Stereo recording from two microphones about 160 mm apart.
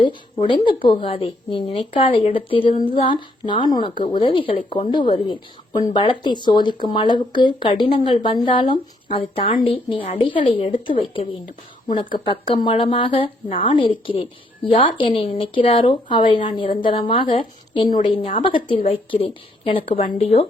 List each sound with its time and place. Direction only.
0.0 s a woman's voice: 30° left (ahead or behind)